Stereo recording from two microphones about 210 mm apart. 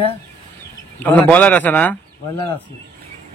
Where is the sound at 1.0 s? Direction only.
5° left (ahead or behind).